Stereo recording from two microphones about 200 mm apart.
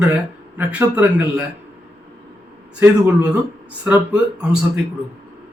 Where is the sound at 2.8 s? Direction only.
5° right (ahead or behind).